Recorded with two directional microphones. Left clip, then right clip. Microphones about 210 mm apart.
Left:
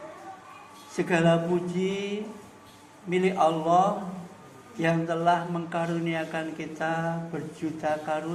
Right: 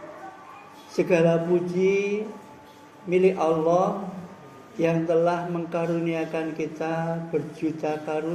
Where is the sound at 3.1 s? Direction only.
20° left (ahead or behind).